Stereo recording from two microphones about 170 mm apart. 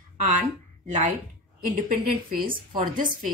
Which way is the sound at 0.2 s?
50° right (ahead or behind).